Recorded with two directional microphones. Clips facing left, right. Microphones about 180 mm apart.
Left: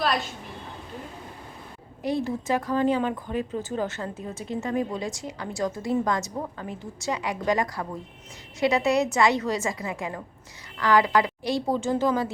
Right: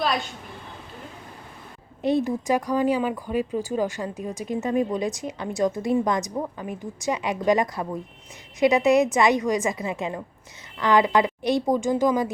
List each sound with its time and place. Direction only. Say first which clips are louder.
0.0 s a woman's voice: right 1 dB; centre (ahead or behind)
2.0 s a woman's voice: right 4 dB; 20° right (ahead or behind)